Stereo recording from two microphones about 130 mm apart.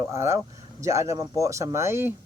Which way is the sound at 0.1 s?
20° right (ahead or behind).